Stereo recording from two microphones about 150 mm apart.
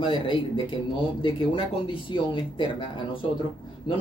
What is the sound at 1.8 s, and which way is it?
Speech, 35° left (ahead or behind).